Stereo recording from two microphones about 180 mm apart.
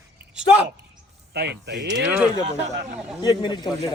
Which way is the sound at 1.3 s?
65° right (ahead or behind).